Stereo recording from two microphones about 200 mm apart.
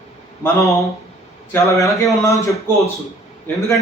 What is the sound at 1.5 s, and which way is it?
A man's voice, 15° left (ahead or behind).